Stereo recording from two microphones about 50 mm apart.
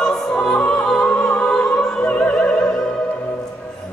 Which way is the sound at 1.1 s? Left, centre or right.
Left.